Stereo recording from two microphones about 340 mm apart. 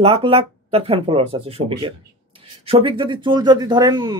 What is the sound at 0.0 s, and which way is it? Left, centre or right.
Speech, centre.